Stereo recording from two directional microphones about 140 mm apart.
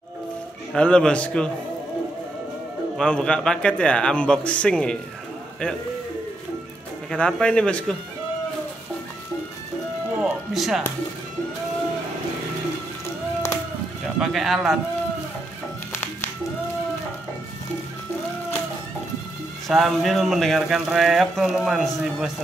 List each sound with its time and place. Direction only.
0.7 s a man's voice: 5° left (ahead or behind)
3.0 s a man's voice: 5° left (ahead or behind)
7.1 s speech: 5° left (ahead or behind)
10.1 s music: 5° right (ahead or behind)
14.0 s speech: centre (ahead or behind)
15.9 s music: 15° left (ahead or behind)
19.7 s speech: centre (ahead or behind)